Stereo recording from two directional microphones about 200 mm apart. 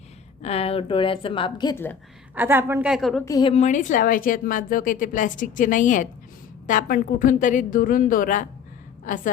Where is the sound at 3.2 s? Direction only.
20° left (ahead or behind).